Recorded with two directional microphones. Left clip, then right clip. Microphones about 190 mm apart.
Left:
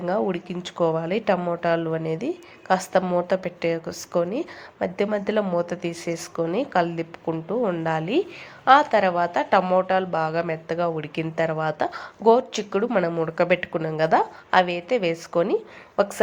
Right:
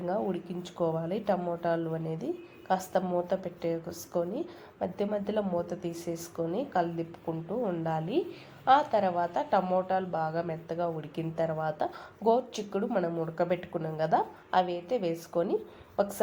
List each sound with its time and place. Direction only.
0.0 s a woman's voice: 20° left (ahead or behind)